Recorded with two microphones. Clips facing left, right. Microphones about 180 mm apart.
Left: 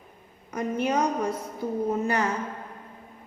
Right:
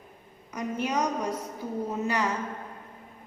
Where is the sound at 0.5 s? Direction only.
55° left (ahead or behind).